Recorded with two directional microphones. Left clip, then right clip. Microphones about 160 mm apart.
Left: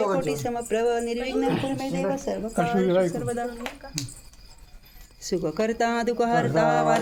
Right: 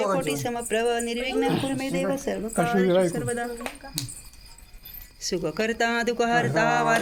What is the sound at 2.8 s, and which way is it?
Speech, 40° right (ahead or behind).